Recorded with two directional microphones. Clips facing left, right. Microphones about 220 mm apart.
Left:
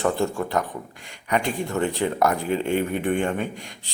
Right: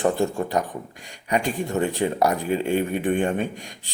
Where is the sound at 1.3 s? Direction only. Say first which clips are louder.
Right 1 dB; 15° right (ahead or behind).